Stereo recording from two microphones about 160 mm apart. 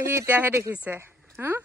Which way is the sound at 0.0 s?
15° right (ahead or behind).